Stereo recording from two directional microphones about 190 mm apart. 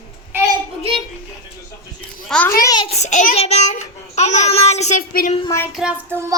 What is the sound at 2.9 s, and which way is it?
A child's voice, 40° left (ahead or behind).